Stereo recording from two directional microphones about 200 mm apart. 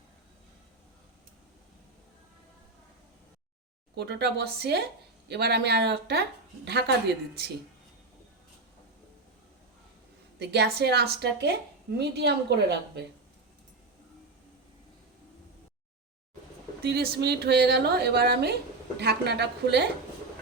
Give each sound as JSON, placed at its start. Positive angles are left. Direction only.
{"t": 3.9, "sound": "a woman's voice", "side_deg": -55}
{"t": 10.3, "sound": "a woman's voice", "side_deg": -55}
{"t": 16.8, "sound": "a woman's voice", "side_deg": -50}